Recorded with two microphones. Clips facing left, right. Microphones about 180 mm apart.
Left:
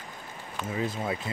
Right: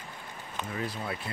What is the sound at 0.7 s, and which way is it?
Speech, 20° left (ahead or behind).